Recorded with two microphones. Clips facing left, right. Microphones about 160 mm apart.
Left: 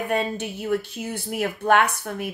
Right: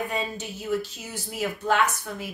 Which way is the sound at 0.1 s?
60° left (ahead or behind).